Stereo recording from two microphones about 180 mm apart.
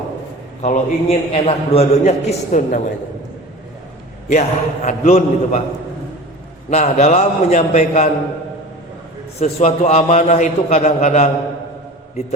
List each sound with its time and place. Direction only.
0.6 s a man's voice: 40° left (ahead or behind)
4.3 s a man's voice: 40° left (ahead or behind)
6.7 s a man's voice: 40° left (ahead or behind)
9.4 s a man's voice: 40° left (ahead or behind)